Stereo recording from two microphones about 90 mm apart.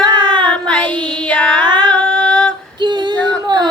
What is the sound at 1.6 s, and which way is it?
Yodeling, 55° right (ahead or behind).